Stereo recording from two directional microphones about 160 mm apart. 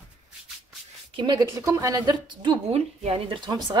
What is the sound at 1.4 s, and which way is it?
A woman's voice, 20° right (ahead or behind).